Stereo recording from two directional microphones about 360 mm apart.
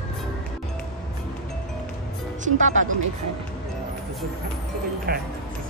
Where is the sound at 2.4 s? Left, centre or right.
Right.